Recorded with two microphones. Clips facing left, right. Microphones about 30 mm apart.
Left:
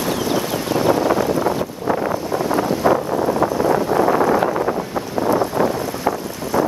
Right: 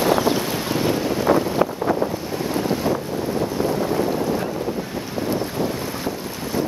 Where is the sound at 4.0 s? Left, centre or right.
Left.